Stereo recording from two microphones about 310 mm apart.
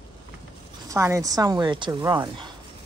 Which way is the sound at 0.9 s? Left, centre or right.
Centre.